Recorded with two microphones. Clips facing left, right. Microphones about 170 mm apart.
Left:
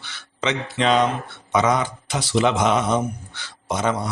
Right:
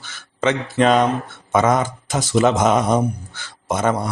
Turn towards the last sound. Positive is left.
turn(degrees=-50)  # may be behind; listen again after turning